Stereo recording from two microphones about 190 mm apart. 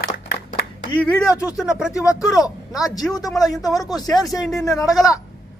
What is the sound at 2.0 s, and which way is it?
Speech, 15° left (ahead or behind).